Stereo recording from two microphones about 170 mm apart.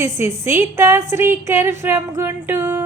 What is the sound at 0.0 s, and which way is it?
A woman's voice, 15° right (ahead or behind).